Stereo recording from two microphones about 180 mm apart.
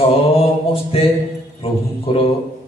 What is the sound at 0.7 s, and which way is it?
A man's voice, 30° left (ahead or behind).